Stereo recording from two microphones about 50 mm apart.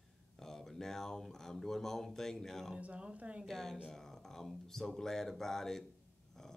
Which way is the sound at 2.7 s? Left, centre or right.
Right.